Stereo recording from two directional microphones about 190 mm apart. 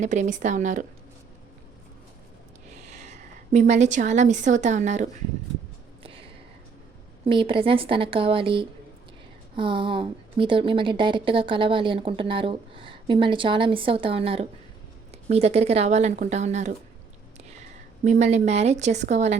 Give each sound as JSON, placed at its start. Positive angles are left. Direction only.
{"t": 0.0, "sound": "speech", "side_deg": -40}
{"t": 2.7, "sound": "a woman's voice", "side_deg": -35}
{"t": 6.0, "sound": "a sound", "side_deg": -30}
{"t": 7.3, "sound": "a woman's voice", "side_deg": -25}
{"t": 18.0, "sound": "speech", "side_deg": -35}